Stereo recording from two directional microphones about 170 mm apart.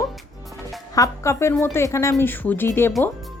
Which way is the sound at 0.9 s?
20° left (ahead or behind).